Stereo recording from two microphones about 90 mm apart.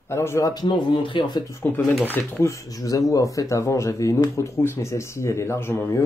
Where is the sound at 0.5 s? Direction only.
55° left (ahead or behind).